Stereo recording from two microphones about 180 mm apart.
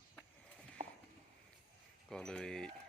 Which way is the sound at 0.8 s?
40° right (ahead or behind).